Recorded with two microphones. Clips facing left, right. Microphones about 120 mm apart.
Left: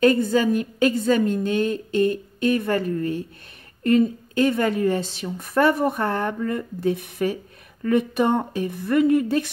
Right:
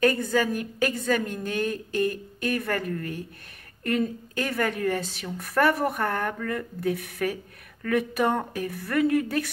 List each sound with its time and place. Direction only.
0.0 s a woman's voice: 25° left (ahead or behind)